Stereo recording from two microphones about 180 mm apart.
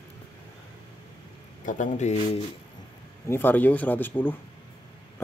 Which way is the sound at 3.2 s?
10° left (ahead or behind).